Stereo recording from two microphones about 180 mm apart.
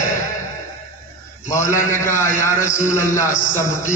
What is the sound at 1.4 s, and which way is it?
A man's voice, 15° left (ahead or behind).